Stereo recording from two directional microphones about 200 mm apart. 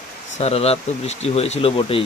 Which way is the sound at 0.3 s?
30° left (ahead or behind).